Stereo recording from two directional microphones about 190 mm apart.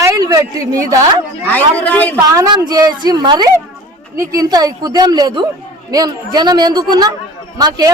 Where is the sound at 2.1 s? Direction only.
20° right (ahead or behind).